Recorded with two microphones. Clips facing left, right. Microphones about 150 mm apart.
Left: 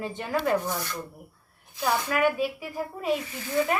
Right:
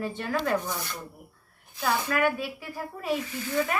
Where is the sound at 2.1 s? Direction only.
15° left (ahead or behind).